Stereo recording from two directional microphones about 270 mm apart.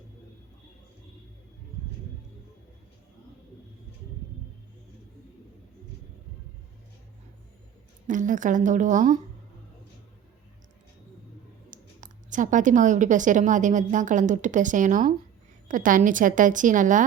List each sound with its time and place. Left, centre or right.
8.0 s a woman's voice: right
11.7 s a woman's voice: right